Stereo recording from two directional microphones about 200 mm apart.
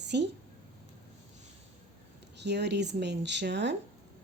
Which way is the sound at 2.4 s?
60° right (ahead or behind).